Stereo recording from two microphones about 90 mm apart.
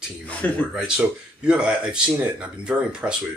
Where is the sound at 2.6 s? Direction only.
10° right (ahead or behind).